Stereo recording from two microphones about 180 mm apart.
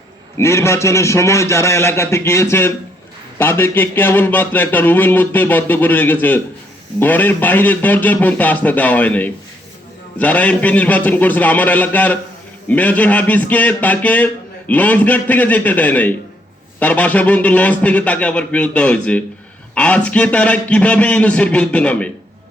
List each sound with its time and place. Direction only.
0.3 s speech: 15° left (ahead or behind)